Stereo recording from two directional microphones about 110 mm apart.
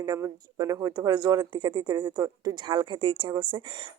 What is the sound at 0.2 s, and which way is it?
Speech, 35° right (ahead or behind).